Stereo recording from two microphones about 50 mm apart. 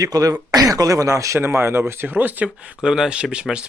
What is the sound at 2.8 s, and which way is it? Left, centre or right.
Speech, centre.